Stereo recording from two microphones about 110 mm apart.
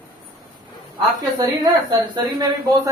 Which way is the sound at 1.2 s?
35° right (ahead or behind).